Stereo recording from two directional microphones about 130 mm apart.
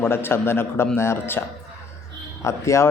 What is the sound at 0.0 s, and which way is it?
A man's voice, 15° left (ahead or behind).